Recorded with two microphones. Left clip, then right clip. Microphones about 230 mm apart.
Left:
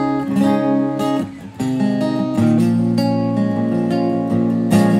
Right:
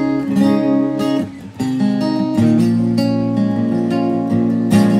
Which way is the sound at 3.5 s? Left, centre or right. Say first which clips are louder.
Right 1 dB; left.